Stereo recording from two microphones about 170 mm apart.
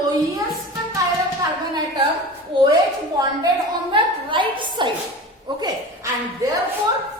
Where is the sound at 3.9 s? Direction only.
30° right (ahead or behind).